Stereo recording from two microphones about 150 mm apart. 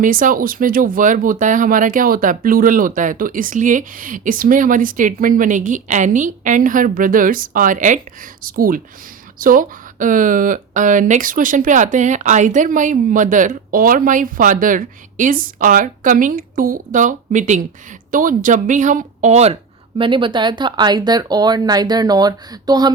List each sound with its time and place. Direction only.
0.0 s speech: 65° right (ahead or behind); by 19.5 s 45° right (ahead or behind)
20.0 s speech: 35° right (ahead or behind)